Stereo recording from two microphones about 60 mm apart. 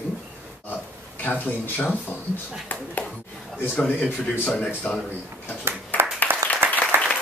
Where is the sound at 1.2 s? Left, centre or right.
Left.